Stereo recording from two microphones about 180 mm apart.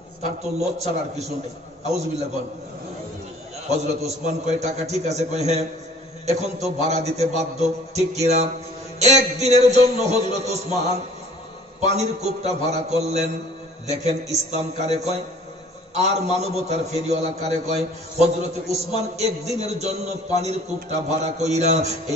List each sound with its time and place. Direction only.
0.7 s a man's voice: 35° right (ahead or behind)
3.6 s a man's voice: 35° right (ahead or behind)